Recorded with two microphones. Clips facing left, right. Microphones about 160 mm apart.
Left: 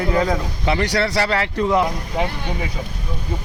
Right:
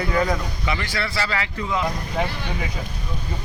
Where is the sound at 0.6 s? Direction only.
65° left (ahead or behind).